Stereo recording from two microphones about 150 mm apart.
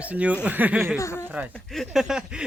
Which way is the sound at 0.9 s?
20° left (ahead or behind).